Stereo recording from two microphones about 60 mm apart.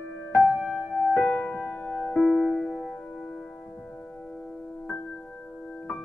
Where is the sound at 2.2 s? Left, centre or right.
Centre.